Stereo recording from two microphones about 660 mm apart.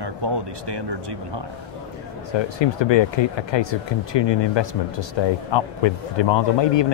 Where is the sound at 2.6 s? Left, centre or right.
Left.